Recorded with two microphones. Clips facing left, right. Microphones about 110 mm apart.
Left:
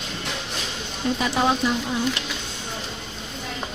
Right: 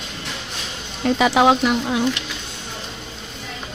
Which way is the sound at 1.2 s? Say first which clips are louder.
Right 7 dB; 90° right.